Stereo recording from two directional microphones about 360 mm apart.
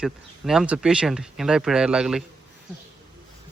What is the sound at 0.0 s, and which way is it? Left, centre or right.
Speech, centre.